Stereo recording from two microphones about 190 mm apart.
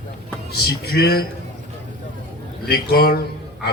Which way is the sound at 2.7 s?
55° left (ahead or behind).